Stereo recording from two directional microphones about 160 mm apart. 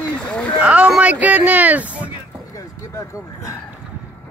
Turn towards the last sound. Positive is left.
turn(degrees=20)  # may be behind; listen again after turning